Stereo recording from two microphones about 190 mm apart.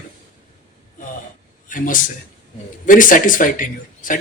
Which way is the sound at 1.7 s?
45° left (ahead or behind).